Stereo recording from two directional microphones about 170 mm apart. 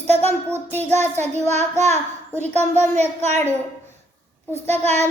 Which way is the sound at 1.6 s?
40° right (ahead or behind).